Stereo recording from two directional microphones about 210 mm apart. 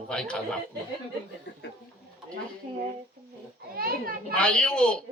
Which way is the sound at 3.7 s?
45° right (ahead or behind).